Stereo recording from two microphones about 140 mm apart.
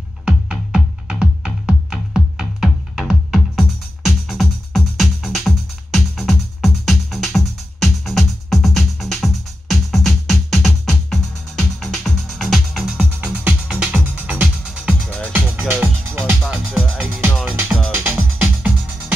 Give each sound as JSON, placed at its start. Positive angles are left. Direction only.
{"t": 0.2, "sound": "music", "side_deg": -5}
{"t": 15.0, "sound": "music", "side_deg": 10}
{"t": 15.7, "sound": "music", "side_deg": -15}